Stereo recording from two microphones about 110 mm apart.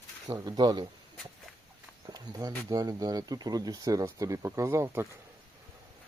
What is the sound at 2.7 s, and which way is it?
Speech, 35° right (ahead or behind).